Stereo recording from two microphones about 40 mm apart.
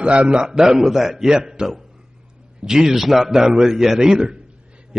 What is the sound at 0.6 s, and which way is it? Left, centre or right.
A man's voice, centre.